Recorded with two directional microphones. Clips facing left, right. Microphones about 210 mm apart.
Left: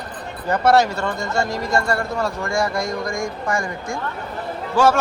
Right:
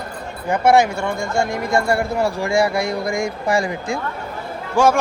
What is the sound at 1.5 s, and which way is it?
Speech, 55° right (ahead or behind).